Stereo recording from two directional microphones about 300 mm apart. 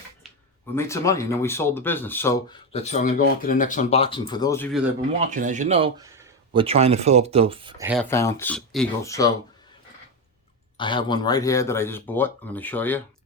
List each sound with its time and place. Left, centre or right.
0.8 s speech: centre
5.1 s speech: right
7.9 s speech: centre
10.8 s speech: centre